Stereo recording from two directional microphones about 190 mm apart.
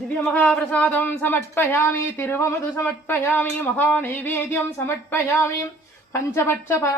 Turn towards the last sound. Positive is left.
turn(degrees=15)  # may be behind; listen again after turning